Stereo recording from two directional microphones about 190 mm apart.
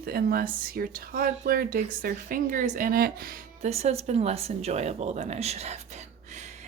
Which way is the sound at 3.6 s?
35° right (ahead or behind).